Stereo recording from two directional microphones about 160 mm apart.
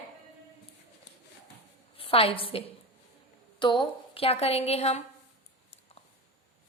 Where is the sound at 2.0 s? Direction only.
35° left (ahead or behind).